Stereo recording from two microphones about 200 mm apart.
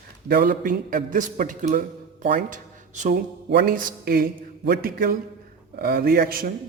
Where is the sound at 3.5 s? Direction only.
50° right (ahead or behind).